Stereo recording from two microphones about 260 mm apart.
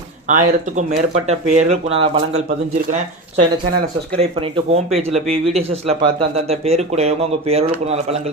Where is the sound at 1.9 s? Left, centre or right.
Right.